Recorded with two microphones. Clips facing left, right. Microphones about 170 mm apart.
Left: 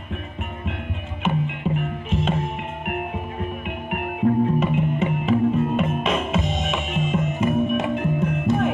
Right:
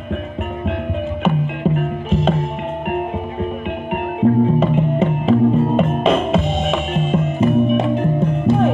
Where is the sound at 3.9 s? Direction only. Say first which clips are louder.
Right 5 dB; 30° right (ahead or behind).